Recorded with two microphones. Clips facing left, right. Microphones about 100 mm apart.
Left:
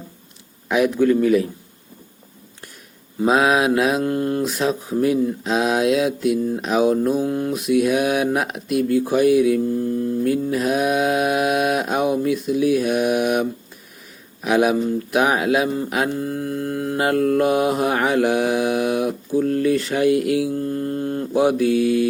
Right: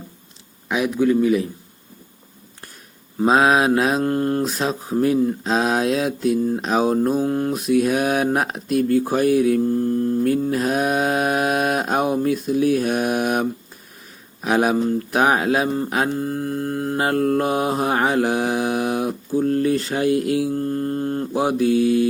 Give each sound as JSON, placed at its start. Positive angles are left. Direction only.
{"t": 0.7, "sound": "a man's voice", "side_deg": -20}
{"t": 3.2, "sound": "speech", "side_deg": -35}